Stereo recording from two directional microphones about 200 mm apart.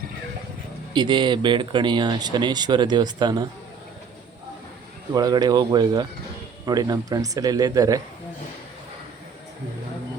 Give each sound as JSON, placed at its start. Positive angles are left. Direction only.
{"t": 0.9, "sound": "speech", "side_deg": -25}
{"t": 5.1, "sound": "speech", "side_deg": -20}